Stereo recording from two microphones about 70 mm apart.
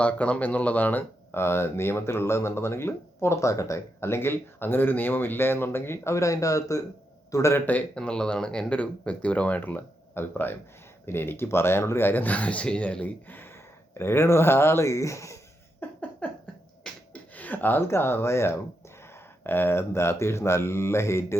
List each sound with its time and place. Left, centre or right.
0.0 s speech: centre; by 7.5 s left
7.5 s speech: left
7.9 s speech: centre
14.0 s speech: left
15.8 s a sound: left
16.9 s a sound: centre
17.3 s speech: left